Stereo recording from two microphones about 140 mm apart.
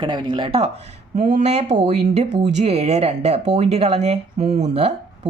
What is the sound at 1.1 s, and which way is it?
Speech, 60° right (ahead or behind).